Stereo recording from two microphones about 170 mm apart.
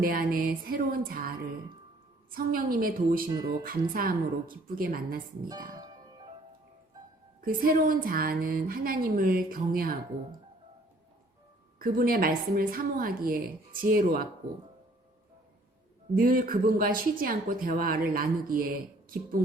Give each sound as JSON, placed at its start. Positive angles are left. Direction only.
{"t": 0.0, "sound": "a woman's voice", "side_deg": -60}
{"t": 2.3, "sound": "a woman's voice", "side_deg": -55}
{"t": 5.5, "sound": "speech", "side_deg": -20}
{"t": 7.4, "sound": "a woman's voice", "side_deg": -55}
{"t": 11.8, "sound": "a woman's voice", "side_deg": -55}
{"t": 16.1, "sound": "a woman's voice", "side_deg": -55}